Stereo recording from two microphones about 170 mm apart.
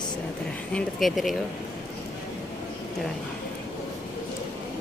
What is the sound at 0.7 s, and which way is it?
Speech, centre (ahead or behind).